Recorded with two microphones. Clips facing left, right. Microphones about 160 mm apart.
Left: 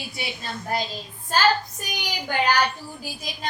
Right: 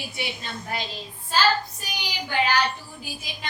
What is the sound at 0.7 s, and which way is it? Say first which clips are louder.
A woman's voice: left 6 dB; 40° left (ahead or behind).